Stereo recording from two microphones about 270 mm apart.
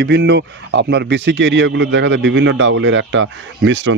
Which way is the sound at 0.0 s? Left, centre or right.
Right.